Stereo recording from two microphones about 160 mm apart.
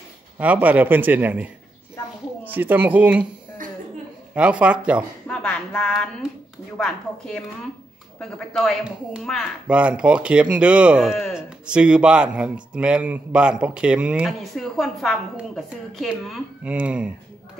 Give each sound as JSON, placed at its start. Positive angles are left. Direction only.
{"t": 0.4, "sound": "speech", "side_deg": -10}
{"t": 4.4, "sound": "speech", "side_deg": -5}
{"t": 5.2, "sound": "a sound", "side_deg": 5}
{"t": 6.8, "sound": "speech", "side_deg": 5}